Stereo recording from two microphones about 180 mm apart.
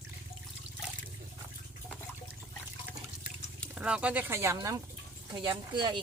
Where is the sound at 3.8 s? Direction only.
5° right (ahead or behind); by 6.0 s 25° right (ahead or behind).